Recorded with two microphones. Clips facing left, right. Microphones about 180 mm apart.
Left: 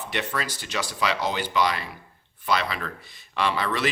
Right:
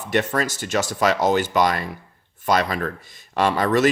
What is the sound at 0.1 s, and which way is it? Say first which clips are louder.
Speech: right 9 dB; 45° right (ahead or behind).